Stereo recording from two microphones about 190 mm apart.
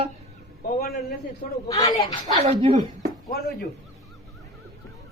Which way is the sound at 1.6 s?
20° left (ahead or behind).